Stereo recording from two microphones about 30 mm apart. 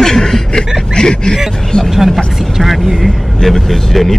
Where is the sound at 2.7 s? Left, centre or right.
Centre.